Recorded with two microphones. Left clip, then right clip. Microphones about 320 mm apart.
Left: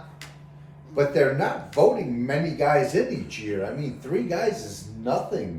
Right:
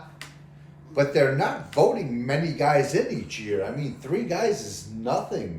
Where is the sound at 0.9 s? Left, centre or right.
Right.